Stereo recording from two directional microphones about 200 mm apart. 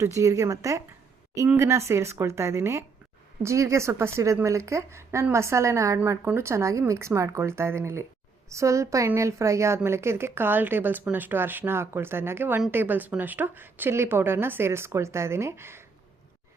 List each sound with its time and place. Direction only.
0.0 s a woman's voice: 15° right (ahead or behind)